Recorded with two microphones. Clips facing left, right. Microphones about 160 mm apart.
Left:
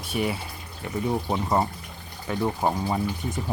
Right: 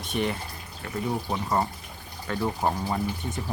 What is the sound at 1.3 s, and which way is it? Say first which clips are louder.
Speech: left 1 dB; 15° left (ahead or behind).